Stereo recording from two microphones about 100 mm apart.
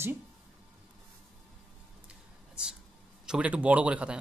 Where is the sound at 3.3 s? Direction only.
15° right (ahead or behind).